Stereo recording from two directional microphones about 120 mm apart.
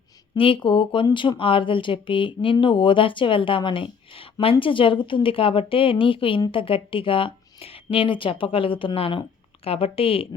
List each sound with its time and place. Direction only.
0.3 s speech: 45° left (ahead or behind)